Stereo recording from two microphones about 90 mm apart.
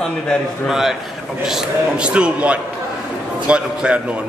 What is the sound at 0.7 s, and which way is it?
A man's voice, 5° right (ahead or behind).